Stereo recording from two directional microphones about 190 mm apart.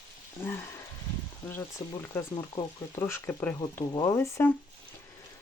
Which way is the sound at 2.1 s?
15° left (ahead or behind).